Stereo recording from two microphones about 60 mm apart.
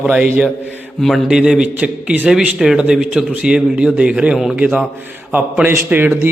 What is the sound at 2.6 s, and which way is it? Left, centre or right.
Speech, centre.